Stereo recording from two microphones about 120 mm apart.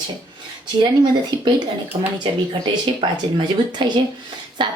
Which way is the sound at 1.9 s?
50° right (ahead or behind).